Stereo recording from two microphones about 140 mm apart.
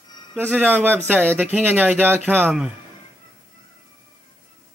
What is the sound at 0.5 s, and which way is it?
Speech, 10° right (ahead or behind).